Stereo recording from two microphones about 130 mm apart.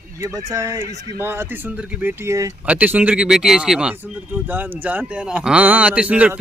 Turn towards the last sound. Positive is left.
turn(degrees=-10)  # may be behind; listen again after turning